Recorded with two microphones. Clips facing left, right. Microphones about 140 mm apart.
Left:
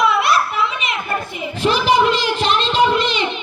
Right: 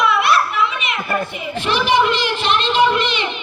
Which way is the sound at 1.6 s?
40° left (ahead or behind).